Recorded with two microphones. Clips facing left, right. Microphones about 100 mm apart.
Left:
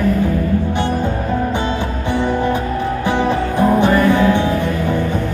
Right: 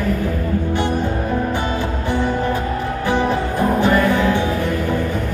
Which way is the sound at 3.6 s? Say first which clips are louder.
Left 3 dB; 20° left (ahead or behind).